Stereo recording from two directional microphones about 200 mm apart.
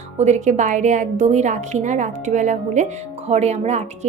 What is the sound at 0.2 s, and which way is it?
A woman's voice, 35° right (ahead or behind).